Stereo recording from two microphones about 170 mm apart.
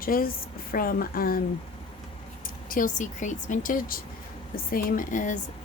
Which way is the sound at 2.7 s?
50° left (ahead or behind).